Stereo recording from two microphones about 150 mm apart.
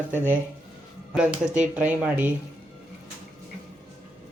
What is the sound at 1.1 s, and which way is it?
Speech, 5° right (ahead or behind).